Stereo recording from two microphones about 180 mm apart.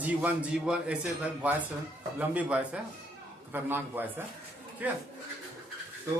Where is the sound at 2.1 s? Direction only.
10° right (ahead or behind).